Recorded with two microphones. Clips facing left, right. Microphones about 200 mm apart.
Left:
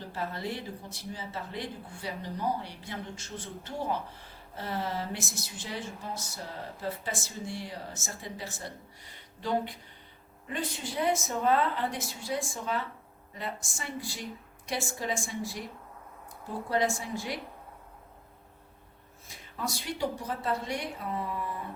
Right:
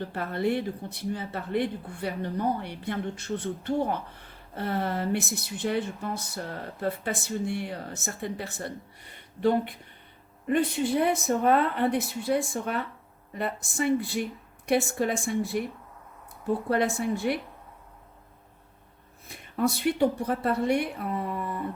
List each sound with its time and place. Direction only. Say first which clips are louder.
0.0 s speech: right 7 dB; 60° right (ahead or behind)
16.6 s speech: right 2 dB; 60° right (ahead or behind)
19.3 s speech: right 10 dB; 60° right (ahead or behind)